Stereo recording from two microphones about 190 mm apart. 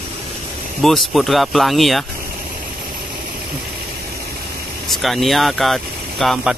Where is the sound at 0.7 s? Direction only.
Centre (ahead or behind).